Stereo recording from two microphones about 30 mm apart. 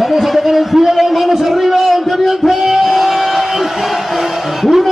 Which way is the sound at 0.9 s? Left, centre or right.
Centre.